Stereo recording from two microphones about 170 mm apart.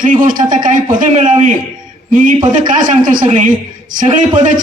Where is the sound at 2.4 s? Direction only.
25° right (ahead or behind).